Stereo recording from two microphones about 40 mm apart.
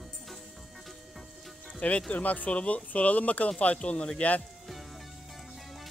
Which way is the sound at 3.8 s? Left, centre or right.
Left.